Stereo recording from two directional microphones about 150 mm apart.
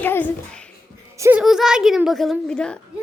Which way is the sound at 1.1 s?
20° right (ahead or behind).